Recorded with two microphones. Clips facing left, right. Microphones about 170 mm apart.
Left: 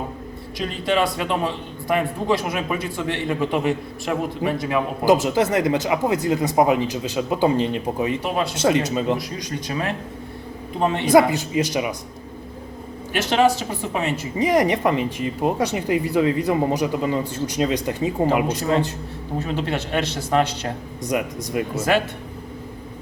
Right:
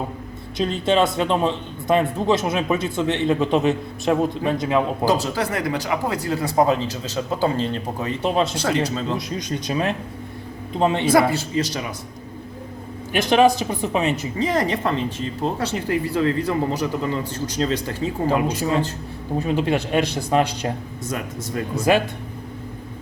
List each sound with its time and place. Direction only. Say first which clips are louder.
0.6 s a man's voice: right 3 dB; 25° right (ahead or behind)
5.0 s speech: left 4 dB; 20° left (ahead or behind)
8.2 s a man's voice: right 3 dB; 25° right (ahead or behind)
8.5 s speech: left 3 dB; 20° left (ahead or behind)
9.1 s a man's voice: right 1 dB; 20° right (ahead or behind)
11.0 s speech: left 6 dB; 20° left (ahead or behind)
13.1 s speech: right 2 dB; 15° right (ahead or behind)
14.3 s speech: left 6 dB; 15° left (ahead or behind)
19.4 s speech: right 4 dB; 15° right (ahead or behind)
21.0 s speech: left 8 dB; 15° left (ahead or behind)
21.9 s speech: right 3 dB; 15° right (ahead or behind)